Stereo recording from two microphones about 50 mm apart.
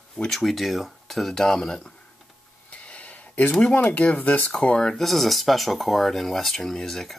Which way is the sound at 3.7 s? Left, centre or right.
Left.